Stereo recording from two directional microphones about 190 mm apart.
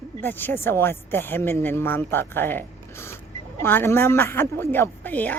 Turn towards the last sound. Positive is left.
turn(degrees=10)  # may be behind; listen again after turning